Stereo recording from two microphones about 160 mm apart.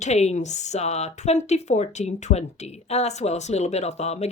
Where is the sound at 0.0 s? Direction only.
45° left (ahead or behind).